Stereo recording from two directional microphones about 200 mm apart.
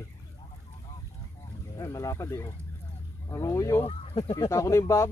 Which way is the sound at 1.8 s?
15° left (ahead or behind).